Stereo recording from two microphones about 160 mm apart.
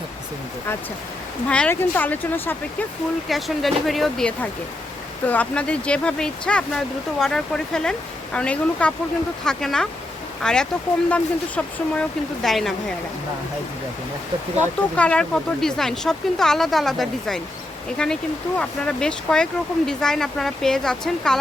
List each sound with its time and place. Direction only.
1.5 s speech: 10° left (ahead or behind)
3.2 s speech: centre (ahead or behind)
14.9 s speech: 10° left (ahead or behind)